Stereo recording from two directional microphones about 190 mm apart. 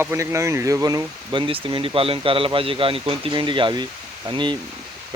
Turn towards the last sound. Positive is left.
turn(degrees=-25)  # may be behind; listen again after turning